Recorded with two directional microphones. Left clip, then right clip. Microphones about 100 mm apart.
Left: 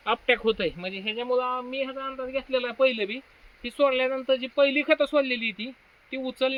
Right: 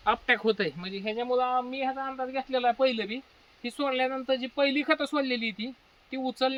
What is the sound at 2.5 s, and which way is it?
Speech, 30° right (ahead or behind).